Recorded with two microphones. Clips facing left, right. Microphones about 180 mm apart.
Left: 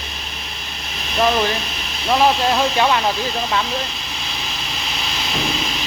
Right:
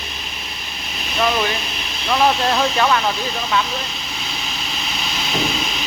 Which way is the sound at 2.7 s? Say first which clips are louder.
Even; 25° left (ahead or behind).